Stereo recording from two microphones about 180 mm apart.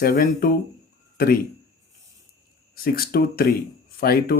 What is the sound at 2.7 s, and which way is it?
Speech, 55° left (ahead or behind).